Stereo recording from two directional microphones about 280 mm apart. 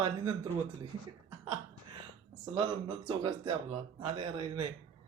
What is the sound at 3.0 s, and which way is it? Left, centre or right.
Speech, centre.